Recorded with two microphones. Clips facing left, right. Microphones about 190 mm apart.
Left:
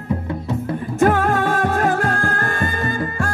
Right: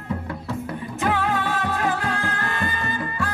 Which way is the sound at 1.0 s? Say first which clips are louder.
Left 7 dB; 50° left (ahead or behind).